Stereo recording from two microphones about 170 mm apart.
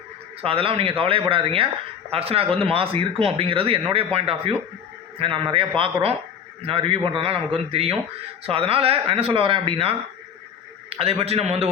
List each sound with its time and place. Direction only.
0.4 s speech: 35° right (ahead or behind)